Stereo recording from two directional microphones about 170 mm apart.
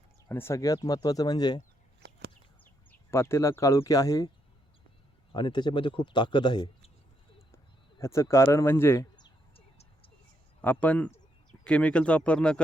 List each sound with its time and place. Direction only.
0.3 s a man's voice: 15° left (ahead or behind)
2.0 s a sound: 85° right
3.1 s a man's voice: 15° left (ahead or behind)
5.3 s a man's voice: 25° left (ahead or behind)
7.5 s a sound: 15° left (ahead or behind)
10.6 s speech: 10° left (ahead or behind)